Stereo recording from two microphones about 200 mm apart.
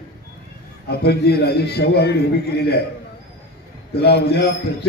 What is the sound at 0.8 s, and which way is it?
A man's voice, 55° left (ahead or behind).